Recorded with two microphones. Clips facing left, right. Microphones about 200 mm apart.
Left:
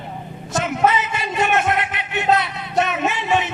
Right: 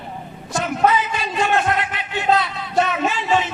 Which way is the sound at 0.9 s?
25° left (ahead or behind).